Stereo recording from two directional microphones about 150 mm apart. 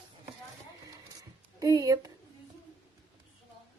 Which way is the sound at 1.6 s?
25° right (ahead or behind).